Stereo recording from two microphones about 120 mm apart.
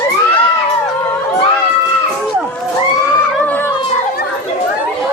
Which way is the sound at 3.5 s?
15° left (ahead or behind).